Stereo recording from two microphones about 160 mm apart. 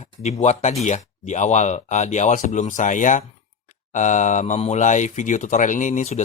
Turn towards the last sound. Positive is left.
turn(degrees=50)  # may be behind; listen again after turning